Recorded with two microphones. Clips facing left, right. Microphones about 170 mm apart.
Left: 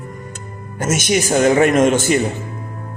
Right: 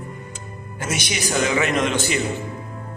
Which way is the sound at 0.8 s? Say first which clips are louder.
Left 9 dB; 45° left (ahead or behind).